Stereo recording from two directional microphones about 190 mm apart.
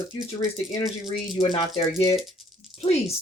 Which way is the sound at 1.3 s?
25° left (ahead or behind).